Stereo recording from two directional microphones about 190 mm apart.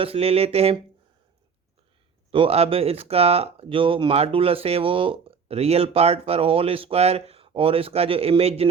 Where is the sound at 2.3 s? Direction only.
30° right (ahead or behind).